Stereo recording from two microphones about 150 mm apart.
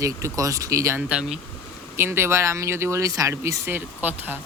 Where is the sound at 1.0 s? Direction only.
5° right (ahead or behind).